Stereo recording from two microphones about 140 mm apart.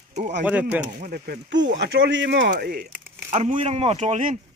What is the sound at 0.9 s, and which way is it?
Speech, 90° right.